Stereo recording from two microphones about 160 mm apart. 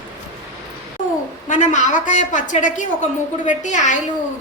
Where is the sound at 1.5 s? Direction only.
50° left (ahead or behind).